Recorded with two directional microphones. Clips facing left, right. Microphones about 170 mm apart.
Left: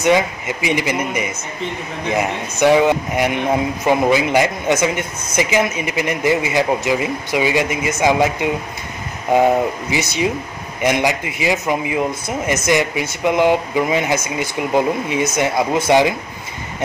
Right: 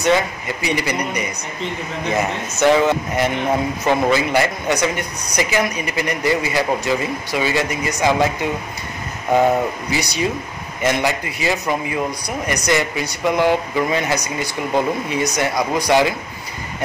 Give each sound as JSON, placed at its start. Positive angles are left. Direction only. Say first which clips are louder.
{"t": 0.0, "sound": "a man's voice", "louder": "left 2 dB", "side_deg": 15}